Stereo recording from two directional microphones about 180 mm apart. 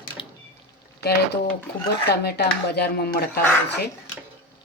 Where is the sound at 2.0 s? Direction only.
65° left (ahead or behind).